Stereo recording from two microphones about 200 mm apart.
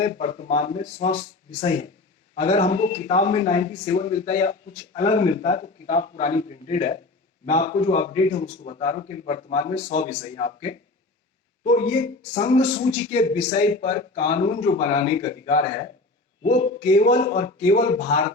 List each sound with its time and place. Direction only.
0.0 s a man's voice: 35° left (ahead or behind)